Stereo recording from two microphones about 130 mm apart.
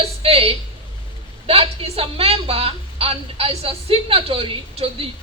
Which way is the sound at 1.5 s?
45° right (ahead or behind).